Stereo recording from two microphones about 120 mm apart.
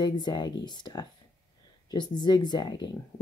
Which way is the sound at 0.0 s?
35° left (ahead or behind).